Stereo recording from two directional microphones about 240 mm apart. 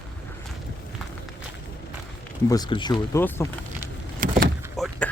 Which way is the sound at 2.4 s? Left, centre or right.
Centre.